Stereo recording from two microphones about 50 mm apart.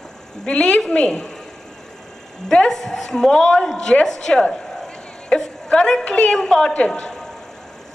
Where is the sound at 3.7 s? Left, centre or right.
Left.